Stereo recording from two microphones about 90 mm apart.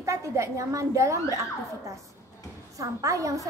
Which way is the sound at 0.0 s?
35° right (ahead or behind).